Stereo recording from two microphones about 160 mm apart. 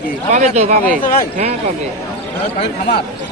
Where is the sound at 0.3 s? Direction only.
45° right (ahead or behind).